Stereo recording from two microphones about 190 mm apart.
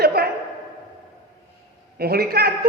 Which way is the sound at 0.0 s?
55° right (ahead or behind).